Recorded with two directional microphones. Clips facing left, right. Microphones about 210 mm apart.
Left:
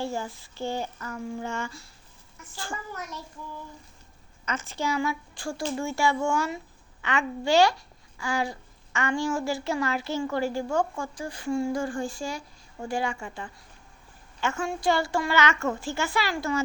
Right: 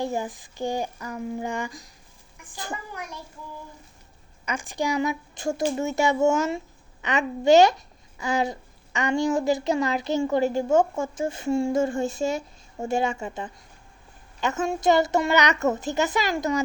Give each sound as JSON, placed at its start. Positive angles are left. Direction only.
{"t": 0.0, "sound": "child singing", "side_deg": -15}
{"t": 4.4, "sound": "a child's voice", "side_deg": -15}